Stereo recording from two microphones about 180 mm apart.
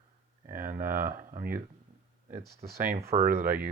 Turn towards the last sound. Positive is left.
turn(degrees=-55)  # may be behind; listen again after turning